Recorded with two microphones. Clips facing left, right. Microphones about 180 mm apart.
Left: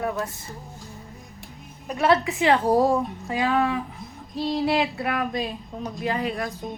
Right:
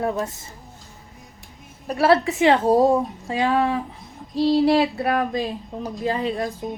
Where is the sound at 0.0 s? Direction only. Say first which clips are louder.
Right 3 dB; 25° right (ahead or behind).